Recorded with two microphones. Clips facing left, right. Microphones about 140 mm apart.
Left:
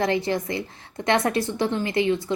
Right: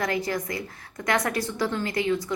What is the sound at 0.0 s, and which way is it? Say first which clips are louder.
A woman's voice: left 4 dB; 25° left (ahead or behind).